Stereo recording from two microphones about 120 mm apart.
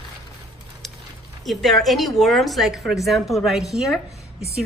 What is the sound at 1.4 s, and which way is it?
A woman's voice, centre (ahead or behind).